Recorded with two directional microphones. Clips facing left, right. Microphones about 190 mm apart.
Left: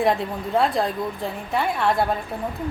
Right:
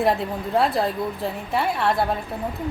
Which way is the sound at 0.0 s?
Centre (ahead or behind).